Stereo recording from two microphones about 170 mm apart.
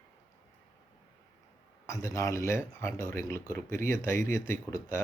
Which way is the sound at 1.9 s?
20° left (ahead or behind).